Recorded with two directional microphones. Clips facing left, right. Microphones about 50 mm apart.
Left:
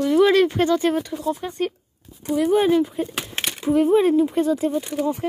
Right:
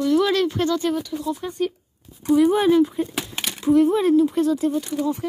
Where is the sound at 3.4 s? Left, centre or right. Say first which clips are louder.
Right 2 dB; left.